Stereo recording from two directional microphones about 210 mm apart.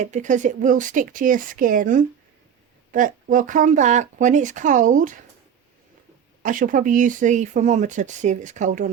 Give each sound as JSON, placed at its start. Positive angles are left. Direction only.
{"t": 0.0, "sound": "speech", "side_deg": -35}
{"t": 6.4, "sound": "speech", "side_deg": -40}